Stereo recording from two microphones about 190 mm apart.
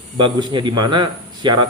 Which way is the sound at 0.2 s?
25° right (ahead or behind).